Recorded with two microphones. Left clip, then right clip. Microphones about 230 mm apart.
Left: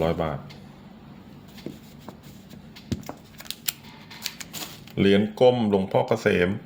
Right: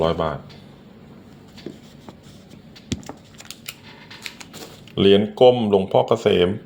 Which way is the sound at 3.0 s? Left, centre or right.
Centre.